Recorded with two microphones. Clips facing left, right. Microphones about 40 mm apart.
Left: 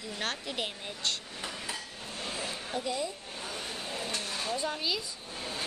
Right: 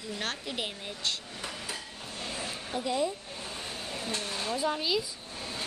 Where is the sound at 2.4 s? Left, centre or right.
Centre.